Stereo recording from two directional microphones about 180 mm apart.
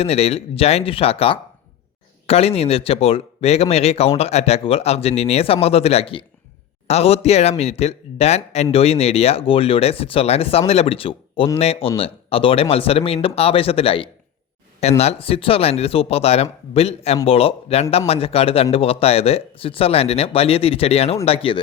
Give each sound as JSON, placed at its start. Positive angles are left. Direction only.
{"t": 0.0, "sound": "a man's voice", "side_deg": 35}